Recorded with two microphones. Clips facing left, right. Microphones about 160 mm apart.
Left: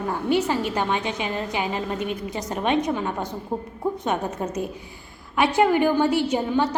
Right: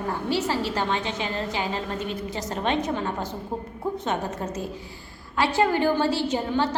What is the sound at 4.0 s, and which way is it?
A woman's voice, 15° left (ahead or behind).